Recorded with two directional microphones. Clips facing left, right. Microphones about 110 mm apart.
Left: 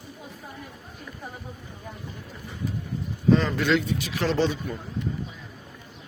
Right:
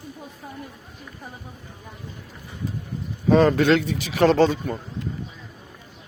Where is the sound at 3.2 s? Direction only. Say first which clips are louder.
Right 5 dB; 60° right (ahead or behind).